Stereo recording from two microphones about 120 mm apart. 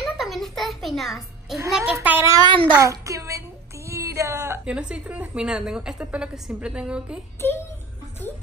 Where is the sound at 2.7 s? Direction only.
25° right (ahead or behind).